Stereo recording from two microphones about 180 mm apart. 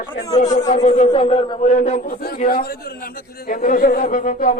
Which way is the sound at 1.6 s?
40° left (ahead or behind).